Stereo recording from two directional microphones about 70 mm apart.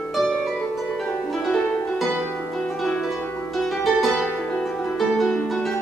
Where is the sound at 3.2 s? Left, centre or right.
Left.